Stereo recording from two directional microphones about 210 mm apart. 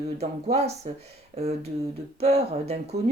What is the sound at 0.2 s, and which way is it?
Speech, 30° right (ahead or behind).